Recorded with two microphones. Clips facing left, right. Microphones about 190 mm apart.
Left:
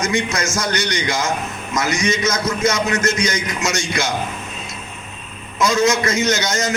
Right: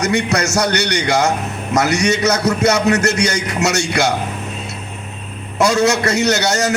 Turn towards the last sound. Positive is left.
turn(degrees=-70)  # may be behind; listen again after turning